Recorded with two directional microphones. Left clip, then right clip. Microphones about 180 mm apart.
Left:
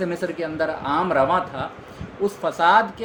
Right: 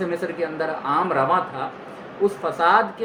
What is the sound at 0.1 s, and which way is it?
Speech, 50° left (ahead or behind).